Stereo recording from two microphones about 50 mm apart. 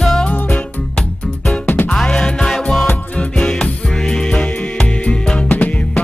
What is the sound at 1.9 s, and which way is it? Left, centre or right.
Music, centre.